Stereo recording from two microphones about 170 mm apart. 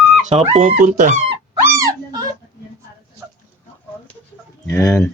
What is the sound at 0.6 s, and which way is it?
Speech, 50° right (ahead or behind).